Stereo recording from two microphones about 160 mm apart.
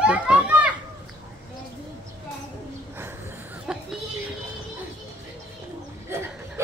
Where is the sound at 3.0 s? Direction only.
15° right (ahead or behind).